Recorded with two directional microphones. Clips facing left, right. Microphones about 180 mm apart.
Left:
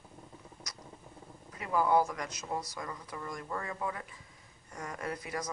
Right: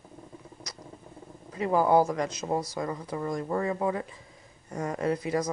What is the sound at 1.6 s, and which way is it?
Speech, 35° right (ahead or behind).